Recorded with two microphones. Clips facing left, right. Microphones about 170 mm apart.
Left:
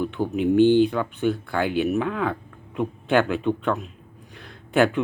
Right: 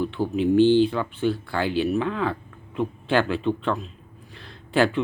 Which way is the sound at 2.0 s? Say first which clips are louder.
Even; 5° left (ahead or behind).